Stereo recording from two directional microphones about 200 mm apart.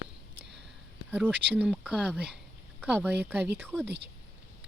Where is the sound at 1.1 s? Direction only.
5° right (ahead or behind).